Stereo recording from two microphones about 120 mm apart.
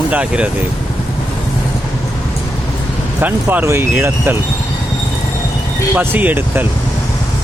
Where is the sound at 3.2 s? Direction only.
15° right (ahead or behind).